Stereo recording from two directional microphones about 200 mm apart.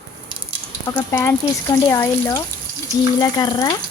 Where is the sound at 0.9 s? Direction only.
15° left (ahead or behind).